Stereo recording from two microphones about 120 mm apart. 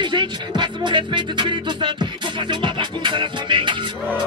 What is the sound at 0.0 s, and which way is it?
Speech, 40° right (ahead or behind).